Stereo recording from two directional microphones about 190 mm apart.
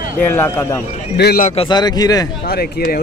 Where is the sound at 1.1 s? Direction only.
50° left (ahead or behind).